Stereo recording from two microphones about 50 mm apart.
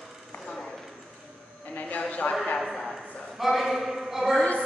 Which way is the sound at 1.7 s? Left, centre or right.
Left.